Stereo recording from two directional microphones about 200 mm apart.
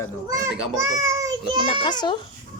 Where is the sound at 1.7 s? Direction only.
20° left (ahead or behind).